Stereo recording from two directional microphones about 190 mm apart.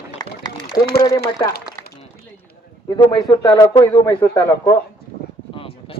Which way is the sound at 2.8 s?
20° left (ahead or behind).